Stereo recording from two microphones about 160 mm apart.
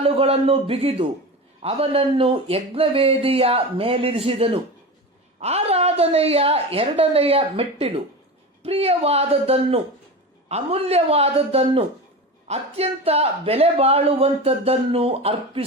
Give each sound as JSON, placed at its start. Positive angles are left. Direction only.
{"t": 0.0, "sound": "speech", "side_deg": -40}